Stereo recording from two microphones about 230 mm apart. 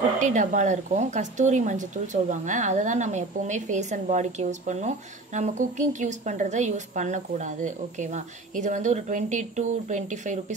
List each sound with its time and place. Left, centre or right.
0.2 s speech: right